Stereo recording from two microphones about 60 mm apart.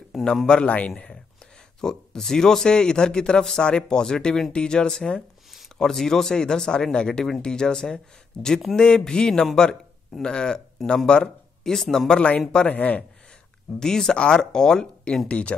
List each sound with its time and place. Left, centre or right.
0.1 s a sound: centre
0.5 s speech: centre
12.6 s speech: left
13.7 s speech: centre